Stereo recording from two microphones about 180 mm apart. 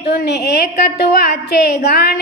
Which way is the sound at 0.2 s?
65° left (ahead or behind).